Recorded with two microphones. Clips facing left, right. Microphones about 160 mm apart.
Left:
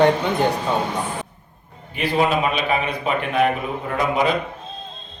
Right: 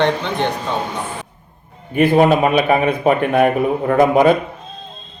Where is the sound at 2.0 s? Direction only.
50° right (ahead or behind).